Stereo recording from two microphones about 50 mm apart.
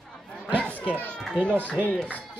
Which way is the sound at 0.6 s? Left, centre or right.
Left.